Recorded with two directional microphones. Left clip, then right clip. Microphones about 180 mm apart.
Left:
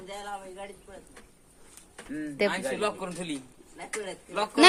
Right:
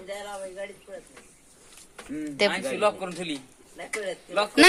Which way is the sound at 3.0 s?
65° left (ahead or behind).